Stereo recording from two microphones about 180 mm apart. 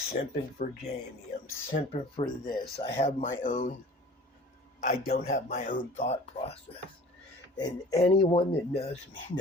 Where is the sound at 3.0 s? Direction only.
40° left (ahead or behind).